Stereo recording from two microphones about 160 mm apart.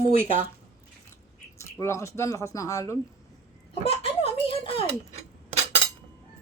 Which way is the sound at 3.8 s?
35° left (ahead or behind).